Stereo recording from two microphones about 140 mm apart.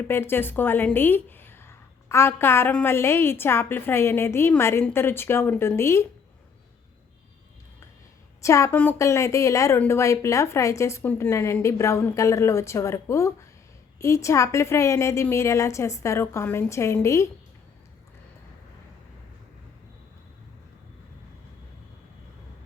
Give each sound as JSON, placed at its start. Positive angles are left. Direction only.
{"t": 0.1, "sound": "a woman's voice", "side_deg": 15}
{"t": 8.4, "sound": "a woman's voice", "side_deg": 20}